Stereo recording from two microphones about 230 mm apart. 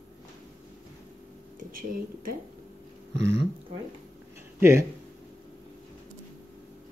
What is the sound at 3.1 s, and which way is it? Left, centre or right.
Speech, right.